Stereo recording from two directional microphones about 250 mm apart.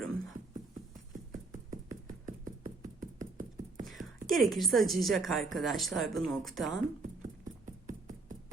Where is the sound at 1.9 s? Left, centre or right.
Right.